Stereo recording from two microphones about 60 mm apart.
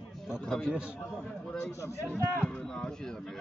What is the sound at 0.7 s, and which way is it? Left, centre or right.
Speech, centre.